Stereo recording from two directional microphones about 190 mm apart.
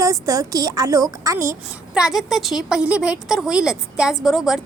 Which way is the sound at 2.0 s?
5° right (ahead or behind).